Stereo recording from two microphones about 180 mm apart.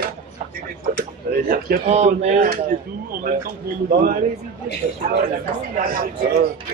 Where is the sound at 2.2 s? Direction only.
45° right (ahead or behind).